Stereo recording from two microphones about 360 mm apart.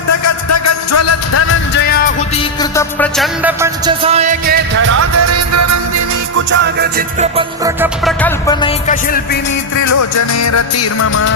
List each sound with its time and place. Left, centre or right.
0.4 s music: left; by 4.9 s right
4.9 s music: right
6.5 s music: right
7.3 s music: centre
8.2 s music: centre
9.7 s music: left